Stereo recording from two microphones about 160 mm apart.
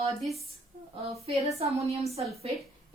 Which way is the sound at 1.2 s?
40° right (ahead or behind).